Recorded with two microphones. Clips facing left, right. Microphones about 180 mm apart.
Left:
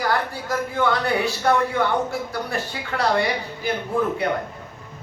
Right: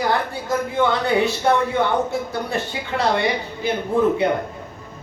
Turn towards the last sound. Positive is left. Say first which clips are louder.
# right 5 dB
turn(degrees=-25)  # may be behind; listen again after turning